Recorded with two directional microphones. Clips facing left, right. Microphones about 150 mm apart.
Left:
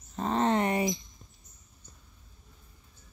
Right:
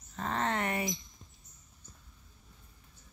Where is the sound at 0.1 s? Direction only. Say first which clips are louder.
Left 7 dB; 20° left (ahead or behind).